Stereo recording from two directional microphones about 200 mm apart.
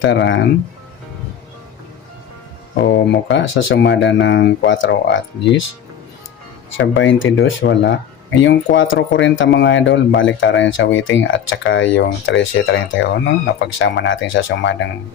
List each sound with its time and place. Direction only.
0.0 s speech: 60° left (ahead or behind)
2.8 s speech: 60° left (ahead or behind)
6.7 s speech: 70° left (ahead or behind)
7.6 s speech: 65° left (ahead or behind)